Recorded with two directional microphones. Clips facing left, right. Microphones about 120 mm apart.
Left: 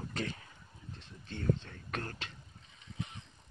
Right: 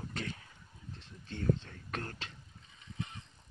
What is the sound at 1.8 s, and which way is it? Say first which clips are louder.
Speech: left 1 dB; 25° right (ahead or behind).